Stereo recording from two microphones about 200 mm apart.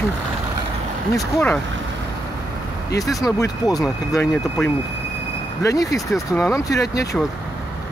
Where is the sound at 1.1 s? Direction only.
10° left (ahead or behind).